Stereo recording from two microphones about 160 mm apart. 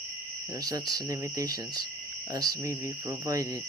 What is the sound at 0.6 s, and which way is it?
Speech, 25° right (ahead or behind).